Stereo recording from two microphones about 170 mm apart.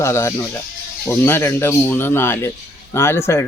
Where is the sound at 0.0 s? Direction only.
15° left (ahead or behind).